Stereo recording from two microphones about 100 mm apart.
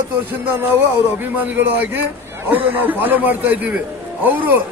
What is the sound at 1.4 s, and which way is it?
A man's voice, 15° right (ahead or behind).